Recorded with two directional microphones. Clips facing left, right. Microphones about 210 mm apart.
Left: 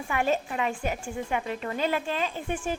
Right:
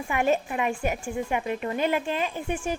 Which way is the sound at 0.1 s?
15° right (ahead or behind).